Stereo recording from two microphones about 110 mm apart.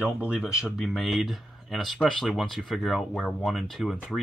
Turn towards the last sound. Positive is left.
turn(degrees=0)  # may be behind; listen again after turning